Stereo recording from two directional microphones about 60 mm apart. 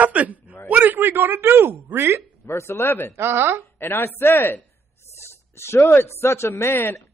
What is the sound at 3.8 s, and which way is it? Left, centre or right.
Speech, left.